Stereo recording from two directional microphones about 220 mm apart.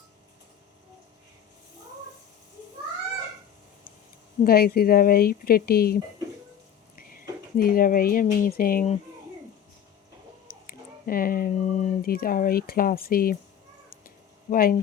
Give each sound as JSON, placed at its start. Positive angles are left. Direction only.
{"t": 4.4, "sound": "speech", "side_deg": 45}
{"t": 10.5, "sound": "speech", "side_deg": 40}
{"t": 14.5, "sound": "speech", "side_deg": 40}